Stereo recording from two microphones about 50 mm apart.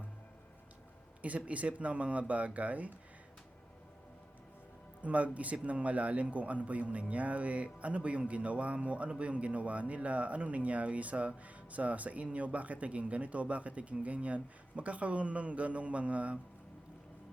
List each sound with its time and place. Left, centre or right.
1.2 s a man's voice: right
5.0 s a man's voice: right